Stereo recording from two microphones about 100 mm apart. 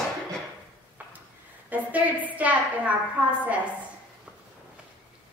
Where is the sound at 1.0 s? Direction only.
20° right (ahead or behind).